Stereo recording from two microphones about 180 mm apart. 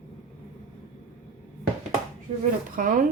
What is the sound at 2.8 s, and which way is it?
Speech, 50° right (ahead or behind).